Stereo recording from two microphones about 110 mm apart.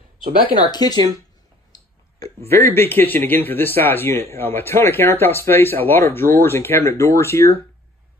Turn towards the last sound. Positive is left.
turn(degrees=25)  # may be behind; listen again after turning